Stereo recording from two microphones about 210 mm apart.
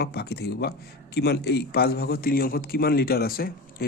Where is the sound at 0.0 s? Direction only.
50° left (ahead or behind).